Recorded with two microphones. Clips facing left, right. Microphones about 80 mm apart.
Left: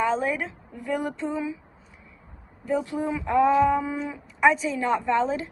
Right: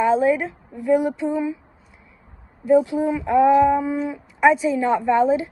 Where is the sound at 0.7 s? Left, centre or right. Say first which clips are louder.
Right 10 dB; centre.